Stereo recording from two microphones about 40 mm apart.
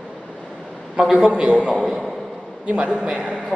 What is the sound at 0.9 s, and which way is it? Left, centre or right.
A woman's voice, centre.